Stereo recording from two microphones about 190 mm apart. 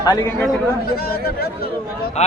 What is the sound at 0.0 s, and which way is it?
Speech, 20° left (ahead or behind).